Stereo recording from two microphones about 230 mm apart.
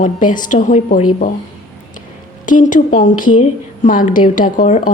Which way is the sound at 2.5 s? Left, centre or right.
Left.